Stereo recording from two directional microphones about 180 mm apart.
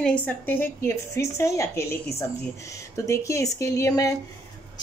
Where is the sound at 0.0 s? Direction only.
5° left (ahead or behind).